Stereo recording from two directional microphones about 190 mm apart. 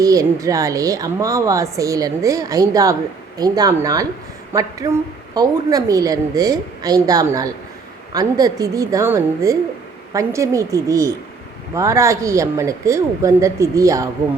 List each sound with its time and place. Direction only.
0.0 s a woman's voice: 15° right (ahead or behind)